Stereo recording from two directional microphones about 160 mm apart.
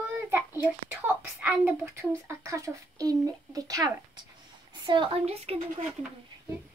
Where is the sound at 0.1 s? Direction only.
15° right (ahead or behind).